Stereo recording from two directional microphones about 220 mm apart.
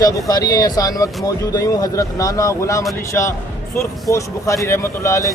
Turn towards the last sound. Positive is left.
turn(degrees=15)  # may be behind; listen again after turning